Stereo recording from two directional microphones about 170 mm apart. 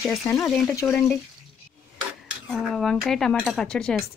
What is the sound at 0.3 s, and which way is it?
Dishes, 15° left (ahead or behind).